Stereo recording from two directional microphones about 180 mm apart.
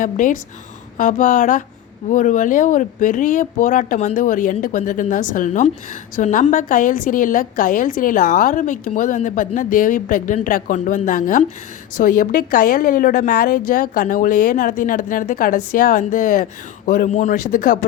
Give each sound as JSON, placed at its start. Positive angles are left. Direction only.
{"t": 0.0, "sound": "a woman's voice", "side_deg": 45}